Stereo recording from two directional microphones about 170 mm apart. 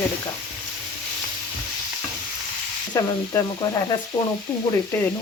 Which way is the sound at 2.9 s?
25° left (ahead or behind).